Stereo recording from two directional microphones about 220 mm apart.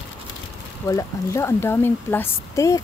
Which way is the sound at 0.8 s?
15° left (ahead or behind).